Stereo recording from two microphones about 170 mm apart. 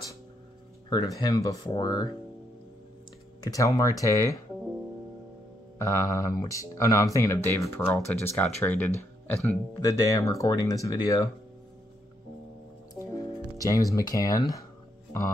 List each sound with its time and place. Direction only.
0.8 s speech: 20° left (ahead or behind)
3.4 s speech: 20° left (ahead or behind)
5.8 s speech: 15° left (ahead or behind)
9.8 s speech: 20° left (ahead or behind)
13.0 s speech: 20° left (ahead or behind)